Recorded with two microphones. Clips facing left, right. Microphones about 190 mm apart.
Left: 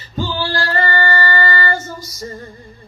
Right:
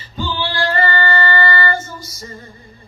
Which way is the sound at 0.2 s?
45° left (ahead or behind).